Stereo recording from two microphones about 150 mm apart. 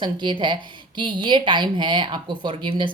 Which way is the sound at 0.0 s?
30° right (ahead or behind).